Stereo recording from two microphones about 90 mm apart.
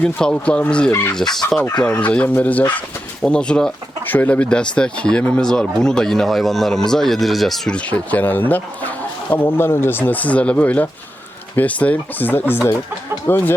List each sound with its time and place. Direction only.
0.0 s speech: 10° left (ahead or behind)
1.9 s speech: 15° left (ahead or behind)
7.8 s speech: 15° left (ahead or behind)